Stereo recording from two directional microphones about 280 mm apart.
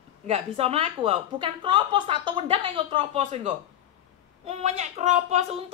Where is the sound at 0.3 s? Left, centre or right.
Right.